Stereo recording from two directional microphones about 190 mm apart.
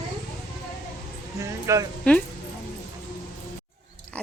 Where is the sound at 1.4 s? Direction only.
15° right (ahead or behind).